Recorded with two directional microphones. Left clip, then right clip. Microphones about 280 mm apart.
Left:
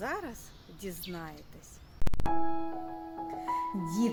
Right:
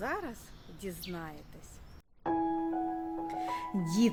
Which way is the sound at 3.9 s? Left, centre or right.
Right.